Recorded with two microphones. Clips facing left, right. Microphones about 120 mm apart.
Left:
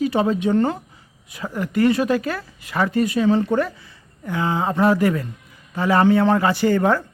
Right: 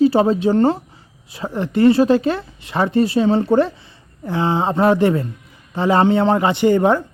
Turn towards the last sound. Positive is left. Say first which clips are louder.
# right 3 dB
turn(degrees=-20)  # may be behind; listen again after turning